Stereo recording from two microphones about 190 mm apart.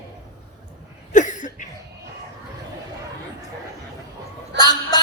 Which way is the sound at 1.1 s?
40° left (ahead or behind).